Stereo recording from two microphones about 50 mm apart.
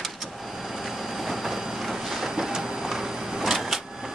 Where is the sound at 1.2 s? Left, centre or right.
Centre.